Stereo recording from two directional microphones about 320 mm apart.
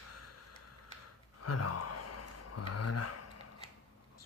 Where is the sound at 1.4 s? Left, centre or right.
Left.